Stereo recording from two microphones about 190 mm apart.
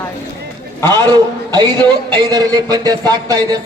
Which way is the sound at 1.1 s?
25° right (ahead or behind).